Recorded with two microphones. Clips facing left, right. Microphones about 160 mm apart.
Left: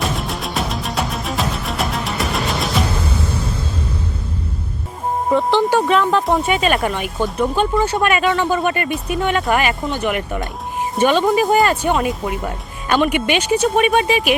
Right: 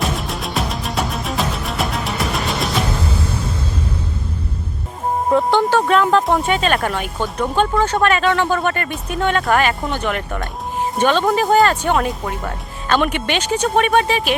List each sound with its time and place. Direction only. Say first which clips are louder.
0.0 s music: even; centre (ahead or behind)
5.3 s a sound: even; centre (ahead or behind)
5.8 s speech: right 1 dB; centre (ahead or behind)
12.4 s speech: left 1 dB; 15° left (ahead or behind)